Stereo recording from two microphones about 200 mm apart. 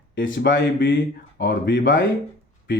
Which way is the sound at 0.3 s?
50° left (ahead or behind).